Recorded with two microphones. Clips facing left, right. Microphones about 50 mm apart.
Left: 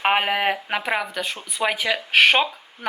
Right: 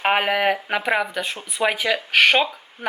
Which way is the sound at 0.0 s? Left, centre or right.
Centre.